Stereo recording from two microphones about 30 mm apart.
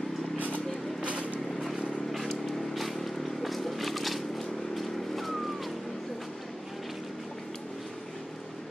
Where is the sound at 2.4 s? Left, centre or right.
Centre.